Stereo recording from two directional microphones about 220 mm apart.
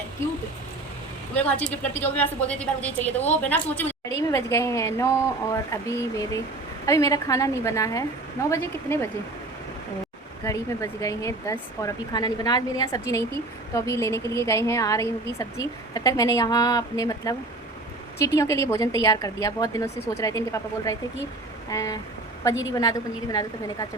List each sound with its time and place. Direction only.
1.4 s speech: 5° left (ahead or behind)
10.4 s speech: 15° left (ahead or behind)